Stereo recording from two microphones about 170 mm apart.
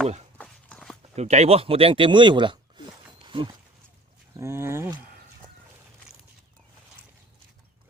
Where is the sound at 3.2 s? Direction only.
30° right (ahead or behind).